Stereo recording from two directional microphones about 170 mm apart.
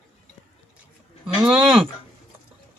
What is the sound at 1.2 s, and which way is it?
Speech, 5° right (ahead or behind).